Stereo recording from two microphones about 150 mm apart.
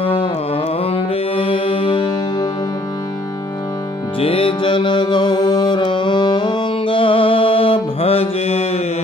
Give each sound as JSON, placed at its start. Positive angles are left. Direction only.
{"t": 0.0, "sound": "carnatic music", "side_deg": 40}
{"t": 0.8, "sound": "music", "side_deg": 40}
{"t": 4.2, "sound": "music", "side_deg": 40}